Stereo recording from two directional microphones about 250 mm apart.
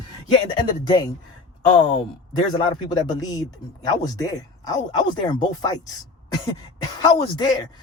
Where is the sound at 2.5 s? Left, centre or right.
Centre.